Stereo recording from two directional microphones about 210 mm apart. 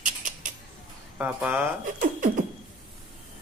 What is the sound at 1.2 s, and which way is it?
Speech, 10° right (ahead or behind).